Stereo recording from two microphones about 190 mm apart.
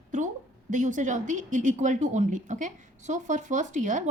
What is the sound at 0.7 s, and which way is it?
A woman's voice, 40° right (ahead or behind).